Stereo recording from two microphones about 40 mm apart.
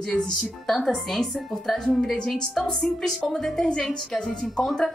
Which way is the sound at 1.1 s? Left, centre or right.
Centre.